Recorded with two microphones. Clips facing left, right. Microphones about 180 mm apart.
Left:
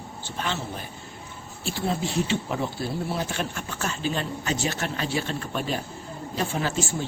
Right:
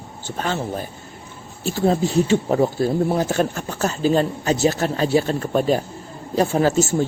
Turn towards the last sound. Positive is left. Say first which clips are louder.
# right 10 dB
turn(degrees=-40)  # may be behind; listen again after turning